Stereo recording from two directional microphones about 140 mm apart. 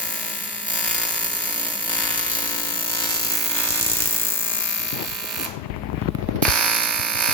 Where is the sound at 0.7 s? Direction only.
10° left (ahead or behind).